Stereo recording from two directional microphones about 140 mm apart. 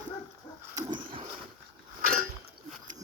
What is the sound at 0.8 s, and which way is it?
Dog, 35° right (ahead or behind).